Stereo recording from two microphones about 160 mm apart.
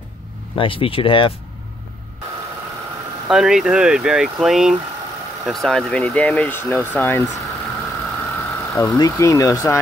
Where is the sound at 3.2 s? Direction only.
5° right (ahead or behind); by 7.2 s 15° left (ahead or behind).